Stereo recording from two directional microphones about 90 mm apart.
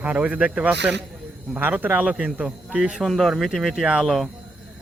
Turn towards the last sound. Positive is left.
turn(degrees=-5)  # may be behind; listen again after turning